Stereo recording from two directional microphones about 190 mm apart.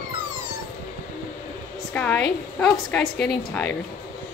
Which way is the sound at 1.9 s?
10° left (ahead or behind).